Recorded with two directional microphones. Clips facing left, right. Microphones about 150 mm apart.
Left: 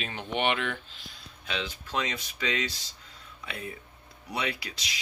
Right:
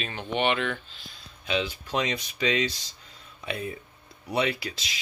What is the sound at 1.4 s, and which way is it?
Speech, 5° right (ahead or behind).